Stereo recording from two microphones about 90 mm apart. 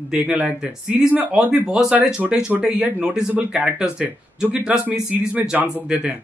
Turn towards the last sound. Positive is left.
turn(degrees=-15)  # may be behind; listen again after turning